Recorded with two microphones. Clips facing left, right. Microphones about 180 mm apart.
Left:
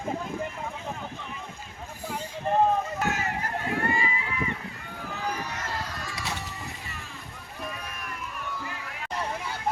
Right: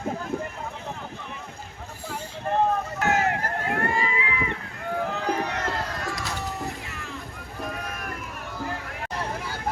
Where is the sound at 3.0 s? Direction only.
70° right (ahead or behind).